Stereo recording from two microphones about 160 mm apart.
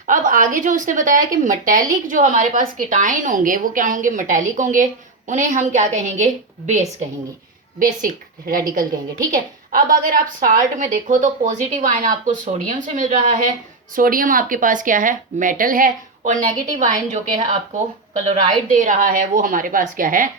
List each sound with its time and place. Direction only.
0.1 s a woman's voice: 55° right (ahead or behind)
8.0 s a woman's voice: 65° right (ahead or behind)
9.7 s a woman's voice: 60° right (ahead or behind)
13.9 s a woman's voice: 60° right (ahead or behind)
18.3 s a woman's voice: 50° right (ahead or behind)